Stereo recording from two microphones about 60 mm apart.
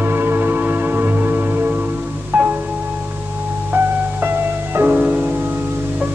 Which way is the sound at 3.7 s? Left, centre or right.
Right.